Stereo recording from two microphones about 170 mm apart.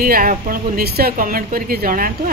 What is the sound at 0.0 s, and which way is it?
Speech, 55° right (ahead or behind).